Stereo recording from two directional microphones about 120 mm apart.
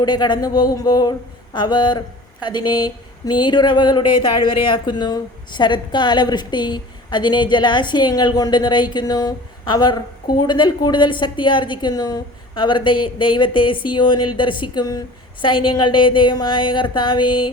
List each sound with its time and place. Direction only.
0.0 s speech: 35° left (ahead or behind)